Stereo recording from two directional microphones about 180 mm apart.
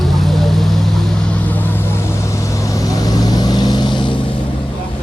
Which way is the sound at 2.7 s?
20° left (ahead or behind).